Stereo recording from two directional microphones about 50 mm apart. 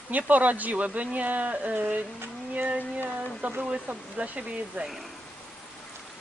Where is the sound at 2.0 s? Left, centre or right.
Right.